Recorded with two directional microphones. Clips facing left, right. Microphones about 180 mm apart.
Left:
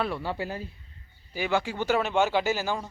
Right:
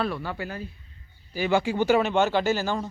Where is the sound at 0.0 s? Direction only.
25° left (ahead or behind).